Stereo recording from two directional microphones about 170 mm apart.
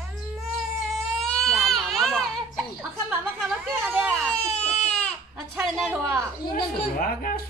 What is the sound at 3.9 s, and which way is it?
Baby cry, 10° right (ahead or behind).